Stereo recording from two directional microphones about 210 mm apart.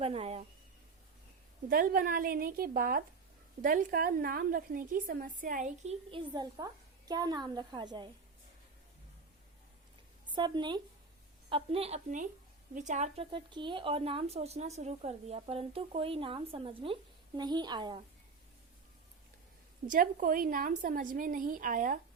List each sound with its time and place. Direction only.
0.0 s speech: 30° right (ahead or behind)
1.7 s a woman's voice: 45° right (ahead or behind); by 8.1 s 20° right (ahead or behind)
10.2 s a woman's voice: 20° right (ahead or behind)
19.9 s a woman's voice: 40° right (ahead or behind)